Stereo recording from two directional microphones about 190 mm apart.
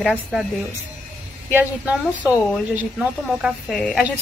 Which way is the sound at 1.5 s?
10° right (ahead or behind).